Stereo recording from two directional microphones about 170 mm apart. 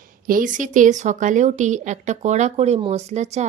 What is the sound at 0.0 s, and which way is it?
Speech, 55° right (ahead or behind).